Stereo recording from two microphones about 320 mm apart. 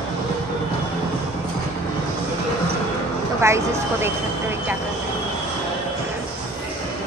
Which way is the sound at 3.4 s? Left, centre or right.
Centre.